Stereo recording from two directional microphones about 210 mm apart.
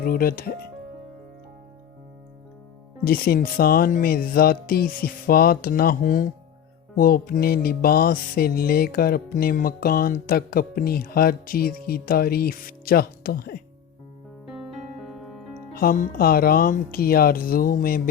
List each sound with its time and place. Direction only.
0.0 s music: 45° left (ahead or behind)
3.0 s music: 45° left (ahead or behind)
14.5 s music: centre (ahead or behind)
15.7 s music: 45° left (ahead or behind)